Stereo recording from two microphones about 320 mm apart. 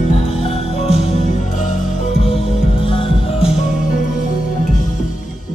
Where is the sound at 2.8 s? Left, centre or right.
Centre.